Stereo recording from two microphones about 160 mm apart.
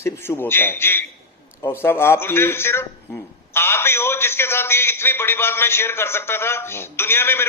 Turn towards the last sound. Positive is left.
turn(degrees=15)  # may be behind; listen again after turning